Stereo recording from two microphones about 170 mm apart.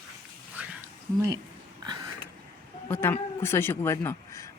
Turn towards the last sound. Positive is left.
turn(degrees=20)  # may be behind; listen again after turning